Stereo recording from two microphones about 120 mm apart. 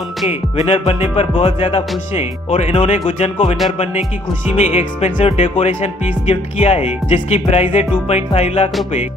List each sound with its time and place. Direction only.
0.3 s speech: 60° left (ahead or behind)
4.6 s speech: 65° left (ahead or behind)